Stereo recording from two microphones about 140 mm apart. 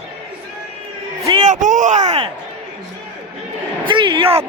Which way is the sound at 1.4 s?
60° right (ahead or behind).